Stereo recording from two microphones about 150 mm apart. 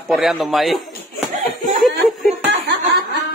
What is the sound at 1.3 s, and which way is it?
Laughter, 65° right (ahead or behind).